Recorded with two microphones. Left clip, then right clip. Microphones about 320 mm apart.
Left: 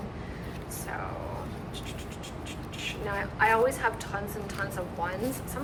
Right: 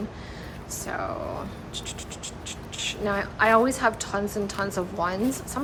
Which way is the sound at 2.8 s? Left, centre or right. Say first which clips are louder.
Right 6 dB; centre.